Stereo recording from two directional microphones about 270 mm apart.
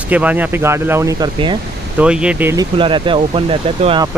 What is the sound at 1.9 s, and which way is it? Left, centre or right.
Speech, centre.